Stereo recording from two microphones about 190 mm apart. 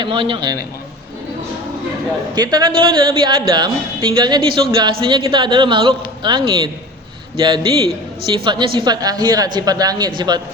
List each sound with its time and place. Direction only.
0.0 s speech: 25° right (ahead or behind)
2.3 s speech: 20° right (ahead or behind)